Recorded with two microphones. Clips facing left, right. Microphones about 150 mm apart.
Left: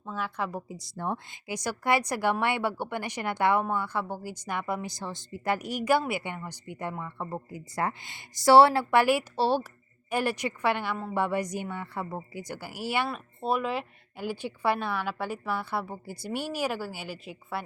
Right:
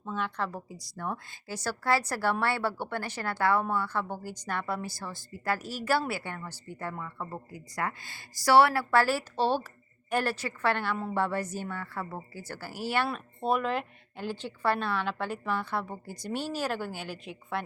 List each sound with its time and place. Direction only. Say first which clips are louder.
0.0 s speech: even; 5° left (ahead or behind)
0.9 s speech: left 3 dB; 30° left (ahead or behind)
1.5 s speech: left 1 dB; 15° left (ahead or behind)